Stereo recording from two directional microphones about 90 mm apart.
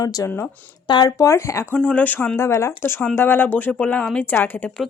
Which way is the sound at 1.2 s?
30° left (ahead or behind).